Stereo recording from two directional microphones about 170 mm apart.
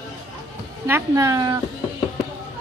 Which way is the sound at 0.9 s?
20° right (ahead or behind).